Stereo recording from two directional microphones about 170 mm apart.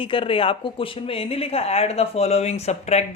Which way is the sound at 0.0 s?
30° left (ahead or behind).